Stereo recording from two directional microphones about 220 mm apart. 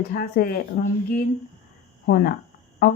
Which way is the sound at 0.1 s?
40° left (ahead or behind).